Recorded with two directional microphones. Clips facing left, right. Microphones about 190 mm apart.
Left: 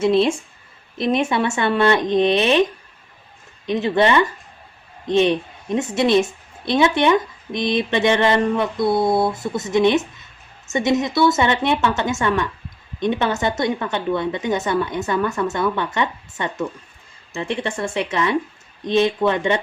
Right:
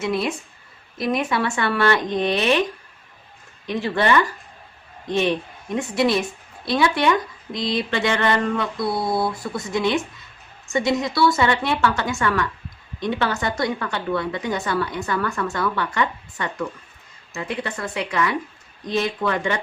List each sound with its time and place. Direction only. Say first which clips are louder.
0.0 s a woman's voice: left 7 dB; 25° left (ahead or behind)
3.7 s a woman's voice: left 3 dB; 20° left (ahead or behind)